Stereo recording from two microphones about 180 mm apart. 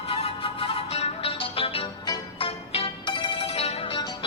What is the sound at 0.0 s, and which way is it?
Music, 30° left (ahead or behind).